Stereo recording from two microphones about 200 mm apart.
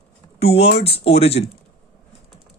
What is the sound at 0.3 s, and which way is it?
Speech, 30° left (ahead or behind).